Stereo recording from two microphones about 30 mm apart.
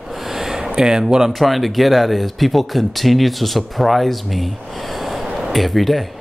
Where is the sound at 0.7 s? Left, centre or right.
Right.